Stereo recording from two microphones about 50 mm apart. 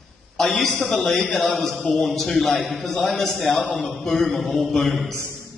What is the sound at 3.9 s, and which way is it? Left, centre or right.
A man's voice, centre.